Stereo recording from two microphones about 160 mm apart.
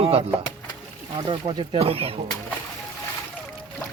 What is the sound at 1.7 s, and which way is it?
Speech, 35° right (ahead or behind).